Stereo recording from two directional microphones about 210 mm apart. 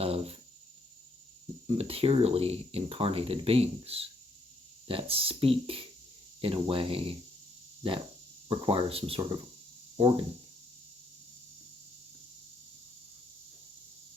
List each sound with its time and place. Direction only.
0.0 s a sound: 30° right (ahead or behind)
1.6 s speech: 25° right (ahead or behind)
8.4 s speech: 25° right (ahead or behind)